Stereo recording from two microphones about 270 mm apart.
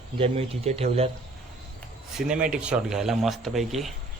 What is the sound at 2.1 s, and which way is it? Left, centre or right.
Speech, centre.